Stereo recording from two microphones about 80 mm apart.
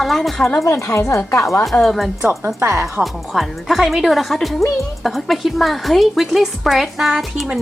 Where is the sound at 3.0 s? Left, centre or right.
Centre.